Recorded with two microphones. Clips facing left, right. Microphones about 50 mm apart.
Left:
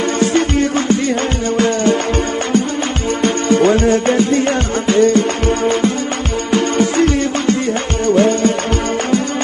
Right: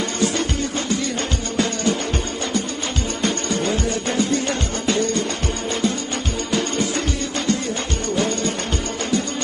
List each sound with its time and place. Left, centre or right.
0.2 s music: left
3.2 s music: left